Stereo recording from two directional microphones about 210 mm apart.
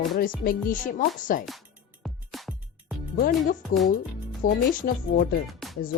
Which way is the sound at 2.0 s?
Centre (ahead or behind).